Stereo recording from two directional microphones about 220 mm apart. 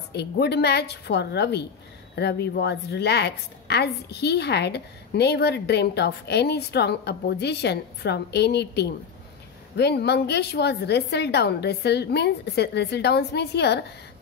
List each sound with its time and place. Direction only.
0.1 s a woman's voice: 50° left (ahead or behind)